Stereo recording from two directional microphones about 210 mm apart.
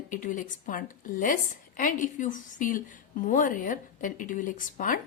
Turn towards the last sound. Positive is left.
turn(degrees=40)  # may be behind; listen again after turning